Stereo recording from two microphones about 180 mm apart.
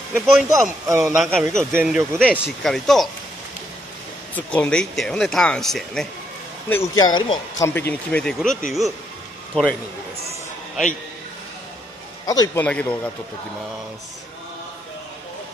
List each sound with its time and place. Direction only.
0.1 s speech: centre (ahead or behind)
0.5 s speech: 15° right (ahead or behind)
1.1 s speech: centre (ahead or behind)
1.7 s speech: 5° right (ahead or behind)
4.4 s speech: 10° left (ahead or behind)
6.7 s speech: 20° left (ahead or behind)
7.6 s speech: 10° left (ahead or behind)
12.3 s speech: 20° left (ahead or behind)
12.6 s speech: 10° left (ahead or behind)